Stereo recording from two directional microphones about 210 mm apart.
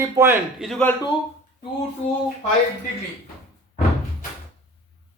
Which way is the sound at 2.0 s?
35° left (ahead or behind).